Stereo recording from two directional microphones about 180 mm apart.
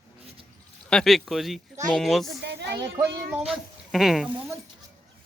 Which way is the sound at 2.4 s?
70° right (ahead or behind).